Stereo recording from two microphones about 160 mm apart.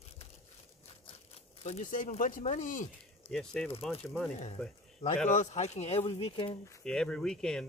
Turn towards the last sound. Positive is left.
turn(degrees=5)  # may be behind; listen again after turning